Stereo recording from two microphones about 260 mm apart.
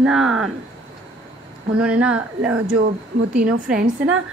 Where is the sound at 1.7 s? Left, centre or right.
Centre.